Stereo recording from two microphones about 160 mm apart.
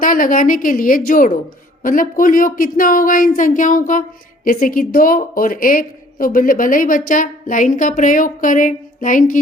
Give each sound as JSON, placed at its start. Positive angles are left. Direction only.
{"t": 0.0, "sound": "a woman's voice", "side_deg": 60}